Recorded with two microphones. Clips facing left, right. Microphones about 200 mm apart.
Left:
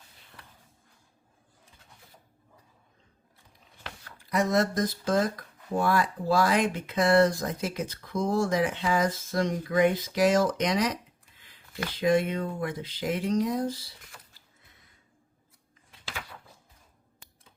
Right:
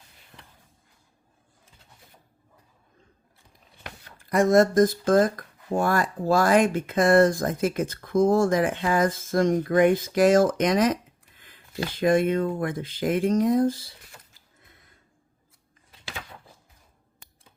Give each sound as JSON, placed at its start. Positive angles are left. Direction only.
{"t": 0.3, "sound": "a sound", "side_deg": -20}
{"t": 4.2, "sound": "speech", "side_deg": -50}
{"t": 11.9, "sound": "speech", "side_deg": -50}